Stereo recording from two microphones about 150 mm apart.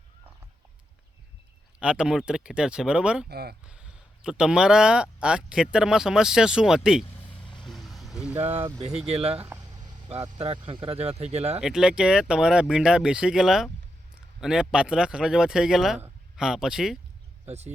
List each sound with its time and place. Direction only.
1.8 s speech: 5° right (ahead or behind)
3.2 s speech: 90° right
3.7 s speech: 5° right (ahead or behind)
7.6 s vehicle: centre (ahead or behind)
8.4 s speech: 40° right (ahead or behind)
9.5 s vehicle: 25° right (ahead or behind)
10.2 s speech: 35° right (ahead or behind)
11.6 s speech: 5° right (ahead or behind)
17.4 s speech: 45° right (ahead or behind)